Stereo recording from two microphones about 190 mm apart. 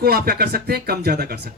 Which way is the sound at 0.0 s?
55° right (ahead or behind).